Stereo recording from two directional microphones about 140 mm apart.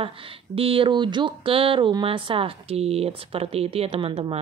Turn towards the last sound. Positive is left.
turn(degrees=-40)  # may be behind; listen again after turning